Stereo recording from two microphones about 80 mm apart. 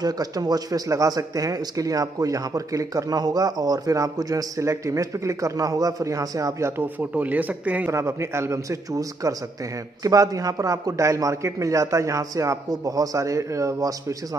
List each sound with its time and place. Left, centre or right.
0.0 s speech: right
6.8 s speech: right
7.9 s a man's voice: right